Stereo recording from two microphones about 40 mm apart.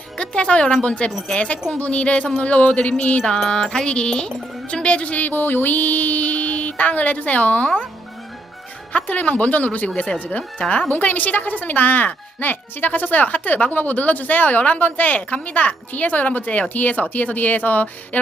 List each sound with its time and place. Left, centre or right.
0.2 s speech: left
3.5 s speech: centre; by 5.3 s left
5.3 s speech: left
8.9 s speech: left
9.9 s speech: left
10.2 s speech: left